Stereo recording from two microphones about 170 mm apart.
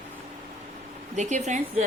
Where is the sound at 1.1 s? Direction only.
45° right (ahead or behind).